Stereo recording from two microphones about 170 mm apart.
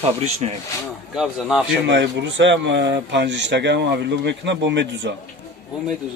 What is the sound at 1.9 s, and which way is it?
Speech, 90° right.